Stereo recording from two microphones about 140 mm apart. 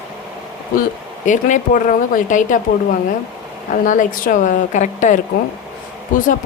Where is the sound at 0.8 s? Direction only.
60° left (ahead or behind).